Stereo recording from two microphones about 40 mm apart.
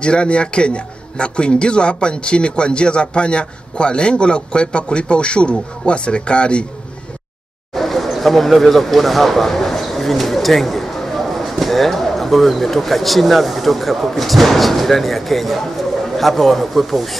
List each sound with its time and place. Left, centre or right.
0.0 s a man's voice: left
7.7 s speech: centre